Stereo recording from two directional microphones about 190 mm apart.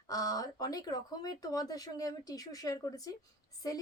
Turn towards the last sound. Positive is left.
turn(degrees=20)  # may be behind; listen again after turning